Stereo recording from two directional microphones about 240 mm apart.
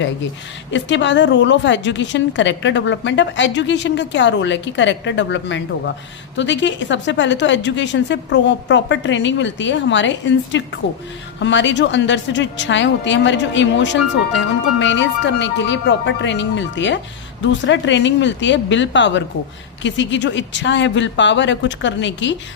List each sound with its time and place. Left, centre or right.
0.7 s a woman's voice: left